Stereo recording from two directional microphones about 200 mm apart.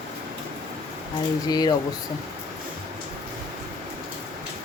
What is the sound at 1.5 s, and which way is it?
Speech, 20° left (ahead or behind).